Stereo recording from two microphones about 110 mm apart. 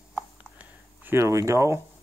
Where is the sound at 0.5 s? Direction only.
20° right (ahead or behind).